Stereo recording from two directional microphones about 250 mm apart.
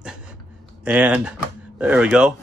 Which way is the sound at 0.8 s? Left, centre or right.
Centre.